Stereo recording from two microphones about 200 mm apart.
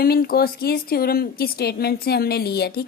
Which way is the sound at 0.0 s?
50° left (ahead or behind).